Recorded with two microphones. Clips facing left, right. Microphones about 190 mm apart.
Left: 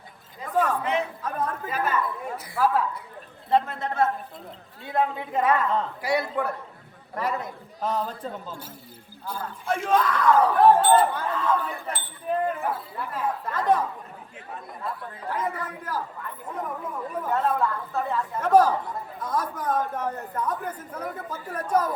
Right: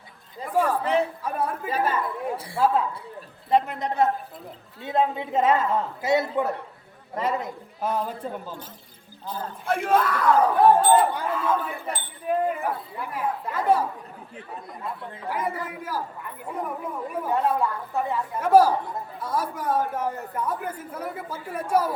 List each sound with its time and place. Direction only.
0.5 s speech: 10° right (ahead or behind)
1.7 s speech: 30° right (ahead or behind)
3.5 s speech: 15° right (ahead or behind)
7.8 s speech: 10° right (ahead or behind)
9.8 s speech: 5° right (ahead or behind)
15.3 s speech: 10° right (ahead or behind)